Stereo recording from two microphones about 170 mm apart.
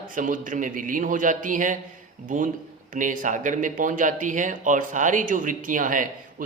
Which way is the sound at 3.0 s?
50° right (ahead or behind).